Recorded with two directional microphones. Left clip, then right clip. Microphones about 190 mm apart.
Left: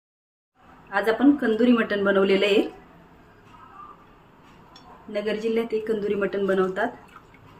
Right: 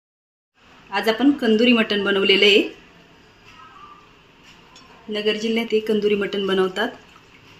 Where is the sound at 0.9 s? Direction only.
45° right (ahead or behind).